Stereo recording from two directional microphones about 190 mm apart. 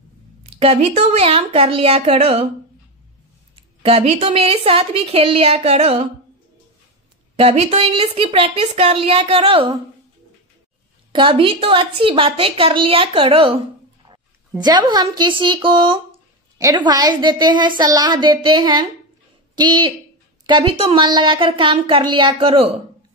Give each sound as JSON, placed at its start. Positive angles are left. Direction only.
{"t": 0.5, "sound": "a woman's voice", "side_deg": -30}
{"t": 3.8, "sound": "a woman's voice", "side_deg": -30}
{"t": 7.3, "sound": "a woman's voice", "side_deg": -30}
{"t": 11.1, "sound": "a woman's voice", "side_deg": -25}
{"t": 14.6, "sound": "a woman's voice", "side_deg": -20}